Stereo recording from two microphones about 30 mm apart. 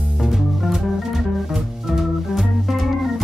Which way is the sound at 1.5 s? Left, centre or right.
Centre.